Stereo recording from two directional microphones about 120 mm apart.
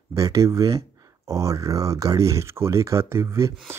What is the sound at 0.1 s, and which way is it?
Speech, 25° right (ahead or behind).